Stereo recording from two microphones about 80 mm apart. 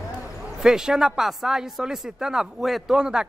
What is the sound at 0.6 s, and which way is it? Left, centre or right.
Speech, centre.